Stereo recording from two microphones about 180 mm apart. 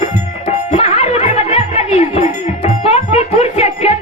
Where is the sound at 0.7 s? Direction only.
35° left (ahead or behind).